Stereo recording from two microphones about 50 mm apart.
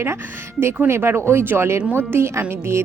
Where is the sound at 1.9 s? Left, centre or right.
Right.